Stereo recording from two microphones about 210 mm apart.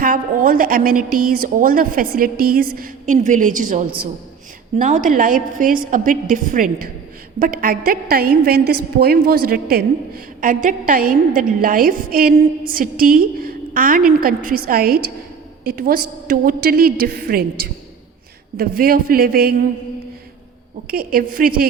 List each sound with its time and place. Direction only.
0.0 s a woman's voice: 40° right (ahead or behind)
20.8 s a woman's voice: 45° right (ahead or behind)